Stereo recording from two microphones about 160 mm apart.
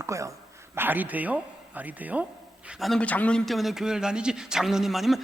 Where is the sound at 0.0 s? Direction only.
20° right (ahead or behind).